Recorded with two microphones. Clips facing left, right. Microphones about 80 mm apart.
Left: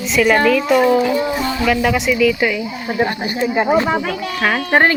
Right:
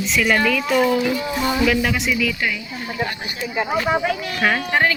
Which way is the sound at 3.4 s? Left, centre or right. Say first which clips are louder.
Left 7 dB; left.